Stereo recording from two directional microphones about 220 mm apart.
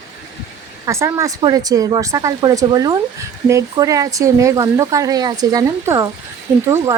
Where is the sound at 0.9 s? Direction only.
15° right (ahead or behind).